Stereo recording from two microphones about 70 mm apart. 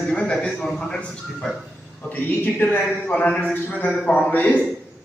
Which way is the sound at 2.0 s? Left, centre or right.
Left.